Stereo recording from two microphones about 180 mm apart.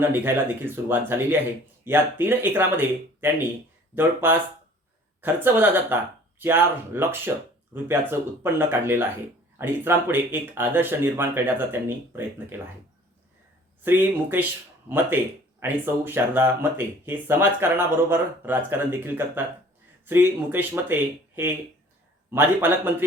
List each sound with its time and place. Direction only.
0.0 s speech: 10° right (ahead or behind)
13.8 s speech: 10° right (ahead or behind)